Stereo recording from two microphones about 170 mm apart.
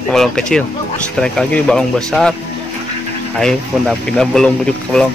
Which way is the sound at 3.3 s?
5° left (ahead or behind).